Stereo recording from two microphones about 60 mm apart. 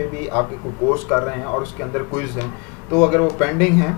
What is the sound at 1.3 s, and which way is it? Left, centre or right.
Speech, centre.